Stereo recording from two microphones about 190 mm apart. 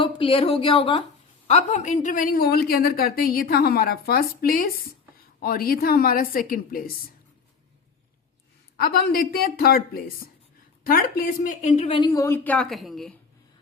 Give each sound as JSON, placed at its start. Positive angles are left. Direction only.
{"t": 0.0, "sound": "a woman's voice", "side_deg": 30}
{"t": 8.7, "sound": "a woman's voice", "side_deg": 50}
{"t": 11.9, "sound": "a woman's voice", "side_deg": 20}